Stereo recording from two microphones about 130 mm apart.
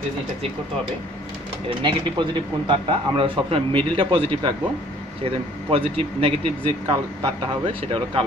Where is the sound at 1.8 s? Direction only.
35° right (ahead or behind).